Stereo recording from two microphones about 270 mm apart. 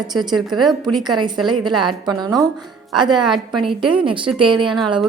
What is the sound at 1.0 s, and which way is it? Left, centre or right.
A woman's voice, centre.